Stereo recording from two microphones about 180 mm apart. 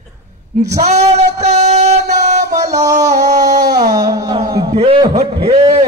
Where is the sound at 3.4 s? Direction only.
20° right (ahead or behind).